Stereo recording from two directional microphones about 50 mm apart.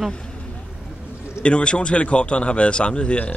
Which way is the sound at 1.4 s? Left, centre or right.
Left.